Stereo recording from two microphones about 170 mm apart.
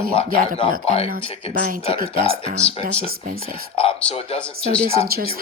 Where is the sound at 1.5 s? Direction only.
45° right (ahead or behind).